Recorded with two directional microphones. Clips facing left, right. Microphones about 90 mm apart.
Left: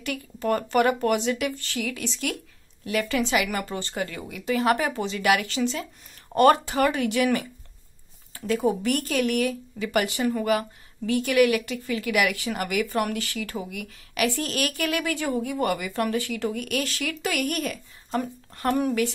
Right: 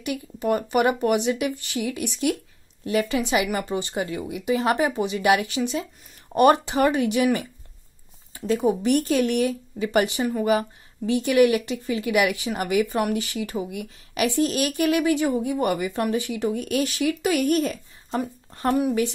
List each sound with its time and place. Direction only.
0.0 s a woman's voice: 15° right (ahead or behind)
8.3 s a woman's voice: 20° right (ahead or behind)
18.5 s a sound: 25° right (ahead or behind)